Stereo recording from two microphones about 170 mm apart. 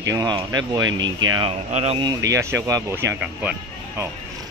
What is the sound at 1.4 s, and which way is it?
Speech, 35° right (ahead or behind).